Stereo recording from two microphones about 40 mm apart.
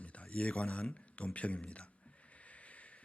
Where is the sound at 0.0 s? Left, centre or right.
Left.